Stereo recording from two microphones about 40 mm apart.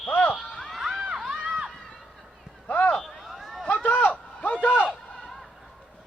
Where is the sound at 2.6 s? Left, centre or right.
Left.